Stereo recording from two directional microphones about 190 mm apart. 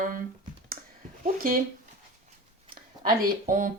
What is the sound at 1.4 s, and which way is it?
Speech, 50° right (ahead or behind).